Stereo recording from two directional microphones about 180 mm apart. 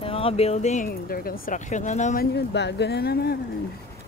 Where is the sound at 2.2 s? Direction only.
70° left (ahead or behind).